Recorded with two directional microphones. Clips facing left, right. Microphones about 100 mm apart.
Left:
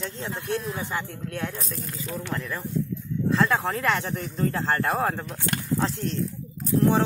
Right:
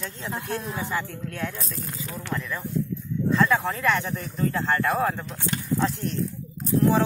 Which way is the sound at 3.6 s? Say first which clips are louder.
Right 1 dB; 35° left (ahead or behind).